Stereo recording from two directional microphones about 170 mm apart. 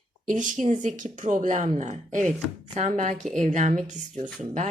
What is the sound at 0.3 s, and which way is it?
Speech, 50° right (ahead or behind).